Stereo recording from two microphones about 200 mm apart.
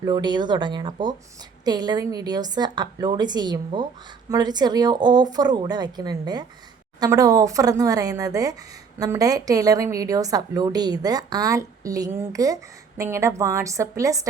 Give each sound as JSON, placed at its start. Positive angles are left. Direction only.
{"t": 0.0, "sound": "a woman's voice", "side_deg": -20}